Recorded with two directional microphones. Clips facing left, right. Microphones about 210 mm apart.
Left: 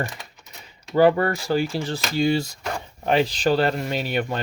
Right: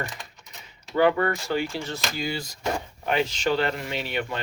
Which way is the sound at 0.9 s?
35° left (ahead or behind).